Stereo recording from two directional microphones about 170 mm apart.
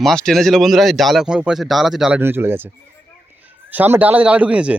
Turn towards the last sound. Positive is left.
turn(degrees=-5)  # may be behind; listen again after turning